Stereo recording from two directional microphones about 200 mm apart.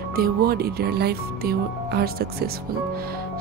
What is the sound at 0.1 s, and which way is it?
Speech, 50° right (ahead or behind).